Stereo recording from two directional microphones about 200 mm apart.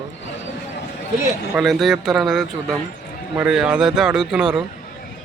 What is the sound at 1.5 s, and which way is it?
Speech, centre (ahead or behind).